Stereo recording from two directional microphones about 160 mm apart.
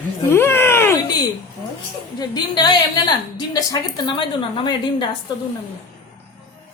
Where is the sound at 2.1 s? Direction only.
25° left (ahead or behind).